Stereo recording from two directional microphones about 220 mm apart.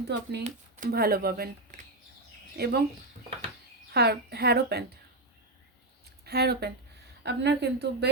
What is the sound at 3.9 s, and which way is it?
Speech, 45° right (ahead or behind).